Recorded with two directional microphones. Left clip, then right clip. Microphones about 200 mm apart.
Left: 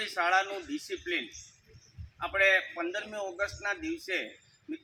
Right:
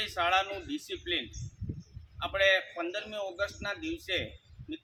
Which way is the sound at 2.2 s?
30° right (ahead or behind).